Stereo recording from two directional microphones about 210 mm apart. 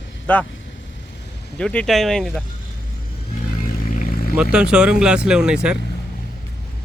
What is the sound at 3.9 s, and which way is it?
Vehicle, 40° left (ahead or behind).